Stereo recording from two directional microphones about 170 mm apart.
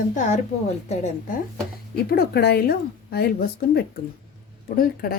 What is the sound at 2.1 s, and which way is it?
Speech, 70° left (ahead or behind).